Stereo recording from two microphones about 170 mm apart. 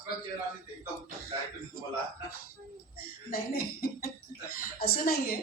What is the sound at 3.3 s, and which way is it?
Speech, 60° left (ahead or behind).